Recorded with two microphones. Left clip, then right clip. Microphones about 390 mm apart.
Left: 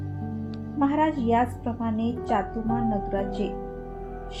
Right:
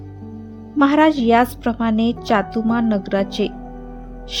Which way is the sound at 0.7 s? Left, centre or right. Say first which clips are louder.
Right 9 dB; right.